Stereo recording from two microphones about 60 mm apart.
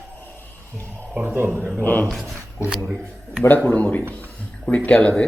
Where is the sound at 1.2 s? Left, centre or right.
Right.